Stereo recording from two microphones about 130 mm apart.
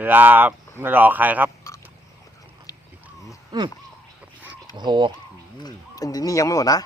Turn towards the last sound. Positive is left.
turn(degrees=30)  # may be behind; listen again after turning